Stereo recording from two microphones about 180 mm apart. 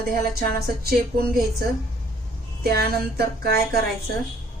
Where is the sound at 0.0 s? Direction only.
55° right (ahead or behind).